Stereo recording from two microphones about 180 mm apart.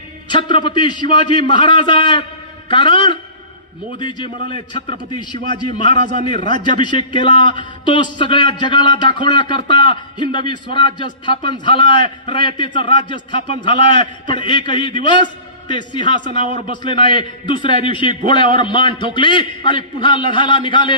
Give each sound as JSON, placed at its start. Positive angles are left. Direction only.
{"t": 0.3, "sound": "a man's voice", "side_deg": 25}